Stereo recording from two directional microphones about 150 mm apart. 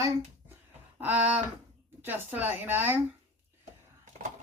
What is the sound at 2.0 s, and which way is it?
Speech, 10° right (ahead or behind).